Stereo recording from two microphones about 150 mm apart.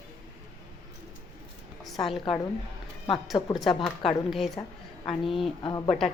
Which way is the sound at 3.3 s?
30° left (ahead or behind).